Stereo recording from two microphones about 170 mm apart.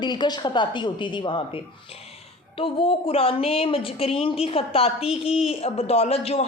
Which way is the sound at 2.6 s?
30° left (ahead or behind).